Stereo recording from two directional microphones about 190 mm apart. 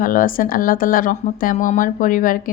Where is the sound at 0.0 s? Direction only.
45° left (ahead or behind).